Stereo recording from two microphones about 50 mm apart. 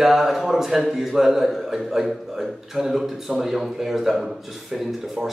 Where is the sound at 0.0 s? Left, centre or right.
Centre.